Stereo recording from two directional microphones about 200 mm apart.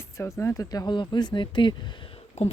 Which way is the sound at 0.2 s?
15° left (ahead or behind).